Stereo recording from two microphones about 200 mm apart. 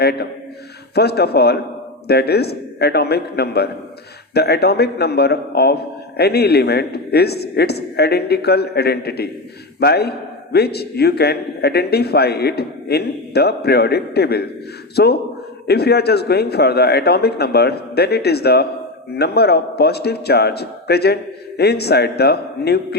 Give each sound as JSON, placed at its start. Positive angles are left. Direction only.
{"t": 0.0, "sound": "a man's voice", "side_deg": 55}